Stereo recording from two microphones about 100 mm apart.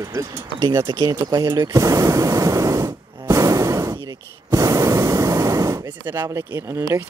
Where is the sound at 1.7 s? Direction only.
35° right (ahead or behind).